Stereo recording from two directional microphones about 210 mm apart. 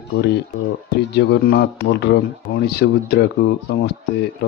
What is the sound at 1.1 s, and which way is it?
Speech, 50° left (ahead or behind).